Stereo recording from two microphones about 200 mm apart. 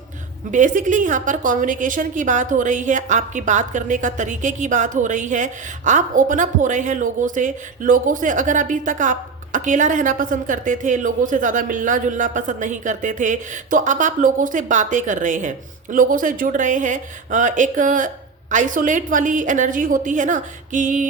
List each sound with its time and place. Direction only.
0.5 s a woman's voice: 40° right (ahead or behind)